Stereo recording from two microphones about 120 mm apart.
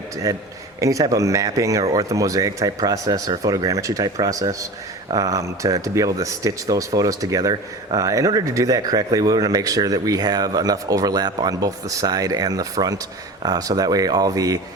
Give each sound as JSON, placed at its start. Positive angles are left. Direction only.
{"t": 0.3, "sound": "speech", "side_deg": -25}